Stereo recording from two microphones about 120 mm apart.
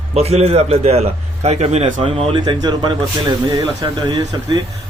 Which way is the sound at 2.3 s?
40° right (ahead or behind).